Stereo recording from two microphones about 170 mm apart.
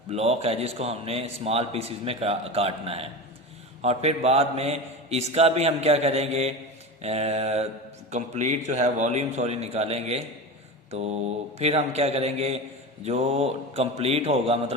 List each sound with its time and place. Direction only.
0.1 s a man's voice: 40° right (ahead or behind)